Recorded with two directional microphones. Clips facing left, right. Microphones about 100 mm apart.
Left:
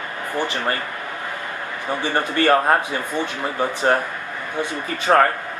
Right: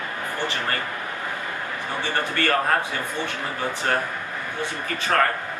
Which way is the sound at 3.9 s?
30° left (ahead or behind).